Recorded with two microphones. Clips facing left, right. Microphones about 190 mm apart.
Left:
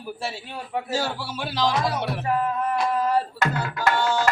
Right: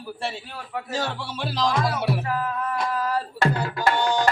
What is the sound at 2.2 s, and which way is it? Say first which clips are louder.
Music: left 3 dB; 25° left (ahead or behind).